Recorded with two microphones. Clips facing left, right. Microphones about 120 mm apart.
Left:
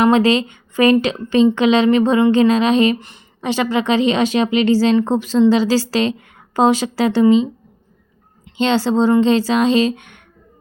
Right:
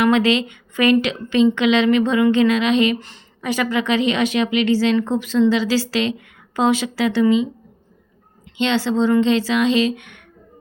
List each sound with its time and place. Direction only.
0.0 s a woman's voice: 35° left (ahead or behind)
3.0 s a woman's voice: 25° left (ahead or behind)
8.5 s a woman's voice: 35° left (ahead or behind)